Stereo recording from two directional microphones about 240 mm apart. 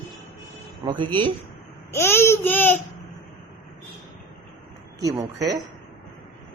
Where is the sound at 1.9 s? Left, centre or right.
Centre.